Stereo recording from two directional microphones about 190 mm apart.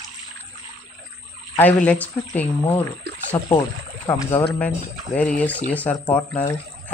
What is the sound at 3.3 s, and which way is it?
Speech, 20° left (ahead or behind).